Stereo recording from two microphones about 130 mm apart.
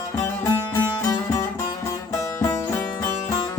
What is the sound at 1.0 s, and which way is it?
Music, 25° left (ahead or behind).